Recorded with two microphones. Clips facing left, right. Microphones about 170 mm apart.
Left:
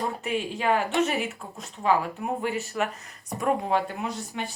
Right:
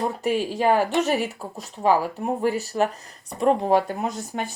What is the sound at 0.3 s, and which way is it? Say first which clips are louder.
Speech: right 4 dB; 35° right (ahead or behind).